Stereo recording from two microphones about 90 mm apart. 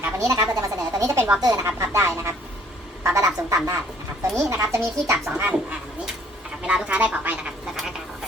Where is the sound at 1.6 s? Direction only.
30° right (ahead or behind).